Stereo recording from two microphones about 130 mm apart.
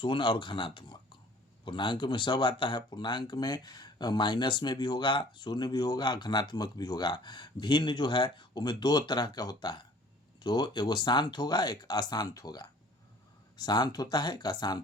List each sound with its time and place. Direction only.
0.0 s speech: 40° left (ahead or behind)